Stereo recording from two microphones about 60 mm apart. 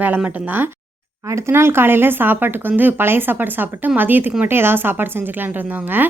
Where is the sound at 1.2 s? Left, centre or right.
Right.